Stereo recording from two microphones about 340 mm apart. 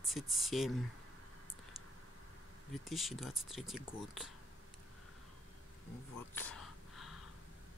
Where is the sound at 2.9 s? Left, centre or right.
Centre.